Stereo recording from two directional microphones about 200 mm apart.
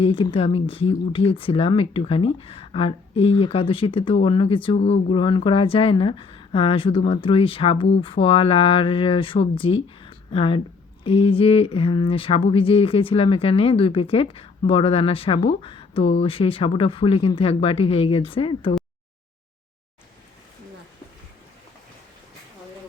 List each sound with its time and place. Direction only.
0.0 s speech: 25° left (ahead or behind)